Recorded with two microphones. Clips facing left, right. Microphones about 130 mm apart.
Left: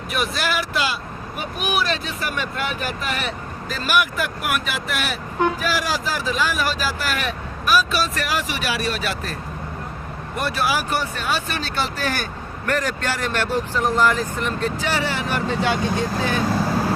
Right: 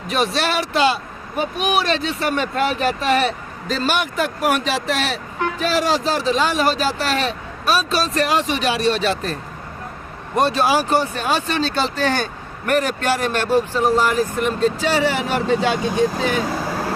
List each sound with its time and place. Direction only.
0.1 s speech: 30° right (ahead or behind)
10.3 s speech: 25° right (ahead or behind)